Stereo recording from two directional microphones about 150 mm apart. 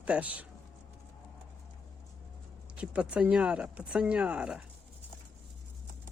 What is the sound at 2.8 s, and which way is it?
Speech, 10° right (ahead or behind).